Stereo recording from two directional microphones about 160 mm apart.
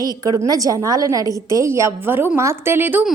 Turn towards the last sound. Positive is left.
turn(degrees=-10)  # may be behind; listen again after turning